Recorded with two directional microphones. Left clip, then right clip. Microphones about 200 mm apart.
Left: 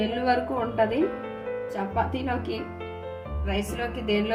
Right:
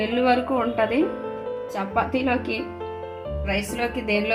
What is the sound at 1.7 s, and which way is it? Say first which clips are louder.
Speech: right 5 dB; 30° right (ahead or behind).